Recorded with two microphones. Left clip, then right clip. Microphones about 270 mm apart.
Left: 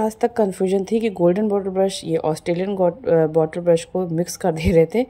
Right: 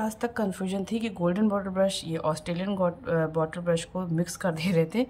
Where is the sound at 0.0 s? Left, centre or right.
Centre.